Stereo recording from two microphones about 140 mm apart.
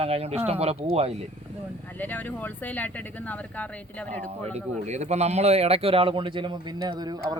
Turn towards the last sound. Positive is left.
turn(degrees=-30)  # may be behind; listen again after turning